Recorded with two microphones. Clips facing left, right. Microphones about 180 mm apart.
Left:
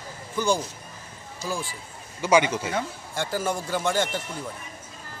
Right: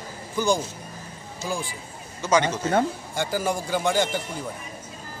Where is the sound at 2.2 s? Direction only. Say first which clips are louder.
Left 1 dB; 10° left (ahead or behind).